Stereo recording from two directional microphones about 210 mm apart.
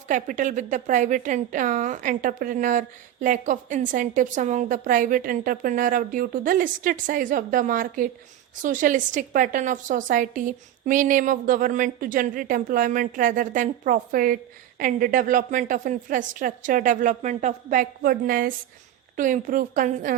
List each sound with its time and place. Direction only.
0.1 s a woman's voice: 35° right (ahead or behind)